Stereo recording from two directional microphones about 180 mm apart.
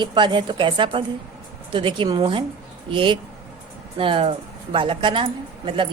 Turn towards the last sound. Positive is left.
turn(degrees=-25)  # may be behind; listen again after turning